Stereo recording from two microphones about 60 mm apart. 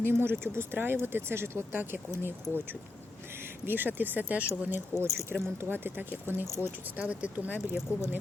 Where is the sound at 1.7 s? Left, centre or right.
Right.